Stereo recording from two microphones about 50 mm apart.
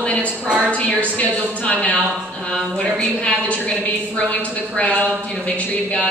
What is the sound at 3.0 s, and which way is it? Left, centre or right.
A woman's voice, left.